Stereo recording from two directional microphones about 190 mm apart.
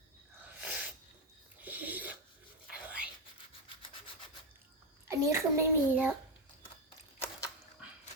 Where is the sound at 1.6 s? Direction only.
10° right (ahead or behind).